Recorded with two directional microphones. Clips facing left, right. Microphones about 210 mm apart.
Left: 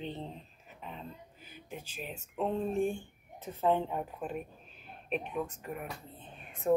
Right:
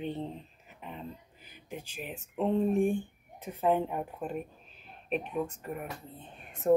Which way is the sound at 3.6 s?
10° right (ahead or behind).